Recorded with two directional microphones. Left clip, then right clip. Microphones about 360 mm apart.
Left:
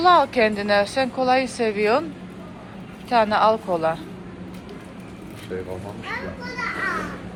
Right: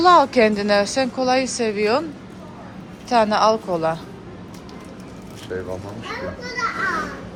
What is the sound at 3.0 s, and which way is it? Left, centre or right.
Speech, centre.